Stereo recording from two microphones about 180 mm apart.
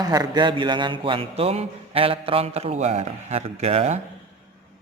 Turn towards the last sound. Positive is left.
turn(degrees=-35)  # may be behind; listen again after turning